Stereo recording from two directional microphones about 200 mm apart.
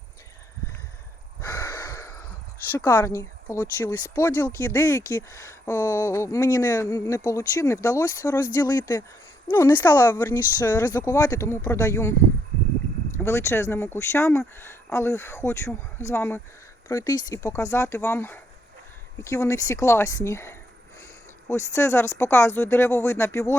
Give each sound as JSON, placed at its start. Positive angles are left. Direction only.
{"t": 1.4, "sound": "a sound", "side_deg": 10}
{"t": 2.7, "sound": "speech", "side_deg": 10}
{"t": 13.2, "sound": "speech", "side_deg": 15}